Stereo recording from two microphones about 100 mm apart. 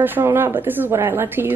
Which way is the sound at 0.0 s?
20° right (ahead or behind).